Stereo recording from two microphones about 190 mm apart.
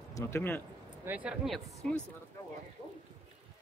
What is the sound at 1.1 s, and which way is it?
Speech, 5° right (ahead or behind).